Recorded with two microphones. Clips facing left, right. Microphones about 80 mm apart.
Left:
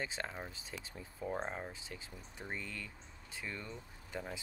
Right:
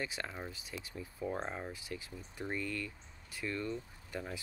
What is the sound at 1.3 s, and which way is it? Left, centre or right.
Speech, centre.